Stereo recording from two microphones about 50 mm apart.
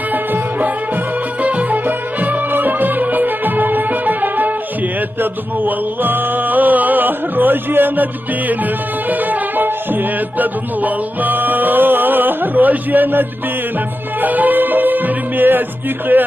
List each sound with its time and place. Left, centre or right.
1.4 s music: right
10.4 s music: right